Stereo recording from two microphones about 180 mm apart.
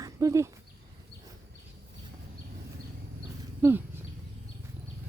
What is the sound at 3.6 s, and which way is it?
Speech, 15° right (ahead or behind).